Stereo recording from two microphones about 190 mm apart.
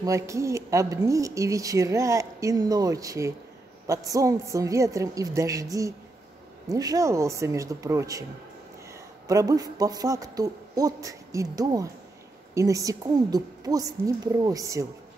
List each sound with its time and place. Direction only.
0.0 s speech: 15° right (ahead or behind)
9.3 s a man's voice: 20° right (ahead or behind)